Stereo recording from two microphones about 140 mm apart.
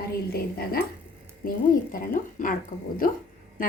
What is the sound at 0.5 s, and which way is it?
A woman's voice, 90° left.